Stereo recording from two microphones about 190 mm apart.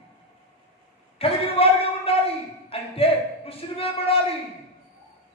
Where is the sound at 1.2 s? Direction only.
30° left (ahead or behind).